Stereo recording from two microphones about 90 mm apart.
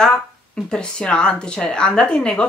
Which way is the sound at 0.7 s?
10° left (ahead or behind).